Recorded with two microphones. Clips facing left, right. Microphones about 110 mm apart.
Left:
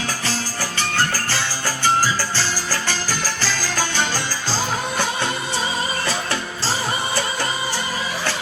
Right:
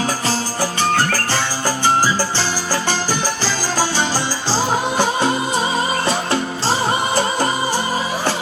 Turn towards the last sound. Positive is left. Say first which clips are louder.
# right 6 dB
turn(degrees=-45)  # may be behind; listen again after turning